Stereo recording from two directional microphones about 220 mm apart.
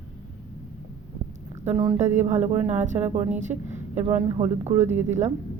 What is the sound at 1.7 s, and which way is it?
Speech, 25° right (ahead or behind).